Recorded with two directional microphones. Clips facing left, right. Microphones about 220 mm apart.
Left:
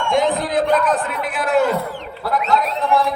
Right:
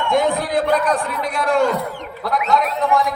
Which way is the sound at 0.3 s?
Centre (ahead or behind).